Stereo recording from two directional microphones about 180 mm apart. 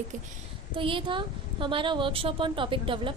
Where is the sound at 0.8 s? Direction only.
30° right (ahead or behind).